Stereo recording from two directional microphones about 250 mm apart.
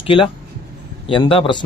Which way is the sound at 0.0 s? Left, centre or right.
Left.